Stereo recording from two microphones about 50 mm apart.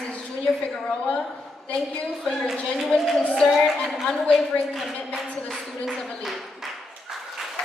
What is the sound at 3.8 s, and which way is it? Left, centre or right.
Speech, centre.